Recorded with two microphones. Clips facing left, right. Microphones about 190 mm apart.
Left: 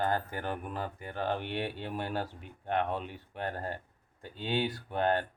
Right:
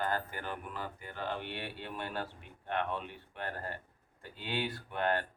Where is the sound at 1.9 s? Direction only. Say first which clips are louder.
Left 4 dB; 40° left (ahead or behind).